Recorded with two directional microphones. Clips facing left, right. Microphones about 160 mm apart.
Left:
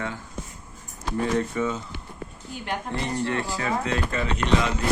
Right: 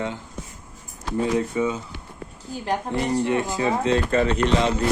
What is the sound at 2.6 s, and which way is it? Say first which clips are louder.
Speech: right 5 dB; 35° right (ahead or behind).